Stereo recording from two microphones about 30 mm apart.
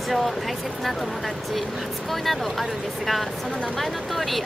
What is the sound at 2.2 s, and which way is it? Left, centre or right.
Speech, centre.